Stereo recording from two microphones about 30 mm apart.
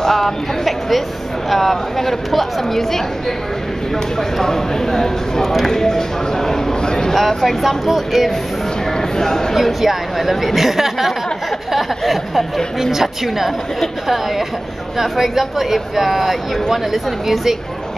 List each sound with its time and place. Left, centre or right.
0.0 s a woman's voice: centre
4.4 s a woman's voice: centre
6.8 s a sound: left
7.2 s speech: centre
8.9 s speech: centre
9.6 s speech: centre
12.0 s speech: centre
12.9 s speech: centre
15.0 s speech: centre